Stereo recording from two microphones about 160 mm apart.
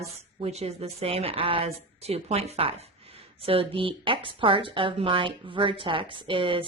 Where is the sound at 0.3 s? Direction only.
40° right (ahead or behind).